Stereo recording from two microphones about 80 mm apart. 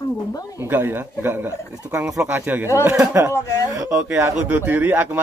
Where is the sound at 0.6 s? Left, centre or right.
Right.